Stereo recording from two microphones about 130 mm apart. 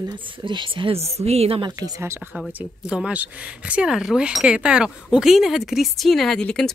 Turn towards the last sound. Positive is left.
turn(degrees=5)  # may be behind; listen again after turning